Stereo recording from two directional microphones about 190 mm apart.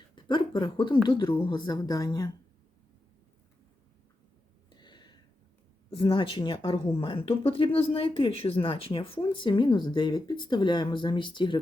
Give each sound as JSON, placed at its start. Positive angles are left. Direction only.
{"t": 0.2, "sound": "speech", "side_deg": 25}
{"t": 4.7, "sound": "a sound", "side_deg": 25}
{"t": 5.9, "sound": "speech", "side_deg": 25}